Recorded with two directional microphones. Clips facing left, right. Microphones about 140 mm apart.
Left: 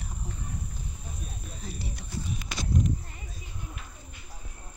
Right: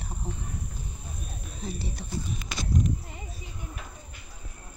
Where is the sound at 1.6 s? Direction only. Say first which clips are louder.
Right 5 dB; 25° right (ahead or behind).